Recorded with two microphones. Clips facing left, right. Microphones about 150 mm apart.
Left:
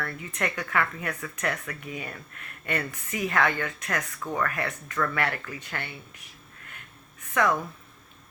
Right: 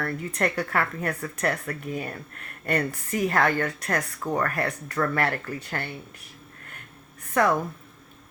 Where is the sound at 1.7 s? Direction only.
45° right (ahead or behind).